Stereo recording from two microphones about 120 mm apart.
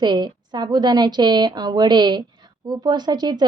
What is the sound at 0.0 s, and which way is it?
Speech, 40° right (ahead or behind).